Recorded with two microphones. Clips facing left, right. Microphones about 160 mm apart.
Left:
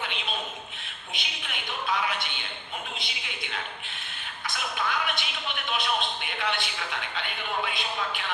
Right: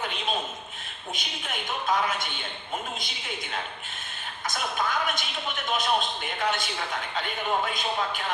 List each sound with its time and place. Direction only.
1.1 s a woman's voice: 45° right (ahead or behind)